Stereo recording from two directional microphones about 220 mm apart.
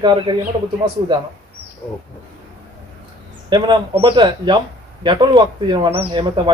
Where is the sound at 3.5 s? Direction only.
20° right (ahead or behind).